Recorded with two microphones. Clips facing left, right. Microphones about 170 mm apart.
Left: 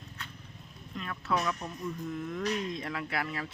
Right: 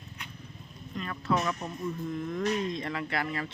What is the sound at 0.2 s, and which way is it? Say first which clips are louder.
Vehicle: even; 15° right (ahead or behind).